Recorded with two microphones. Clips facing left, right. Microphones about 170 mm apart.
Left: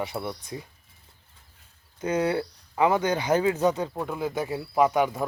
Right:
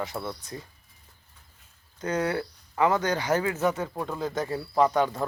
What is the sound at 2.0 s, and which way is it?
Speech, 10° left (ahead or behind).